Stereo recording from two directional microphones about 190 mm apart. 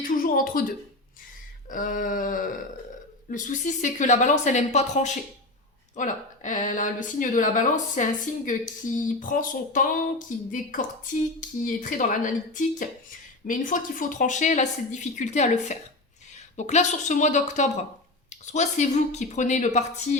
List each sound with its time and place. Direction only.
0.0 s speech: 50° left (ahead or behind)
1.7 s speech: 45° left (ahead or behind)